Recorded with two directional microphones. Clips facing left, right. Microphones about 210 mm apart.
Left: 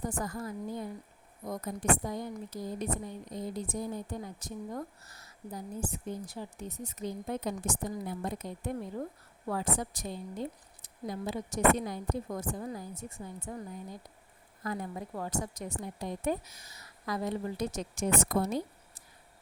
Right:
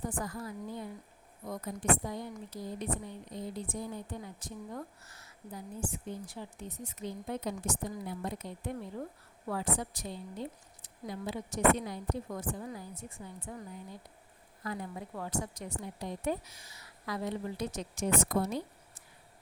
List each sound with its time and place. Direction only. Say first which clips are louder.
0.1 s a woman's voice: left 2 dB; 45° left (ahead or behind)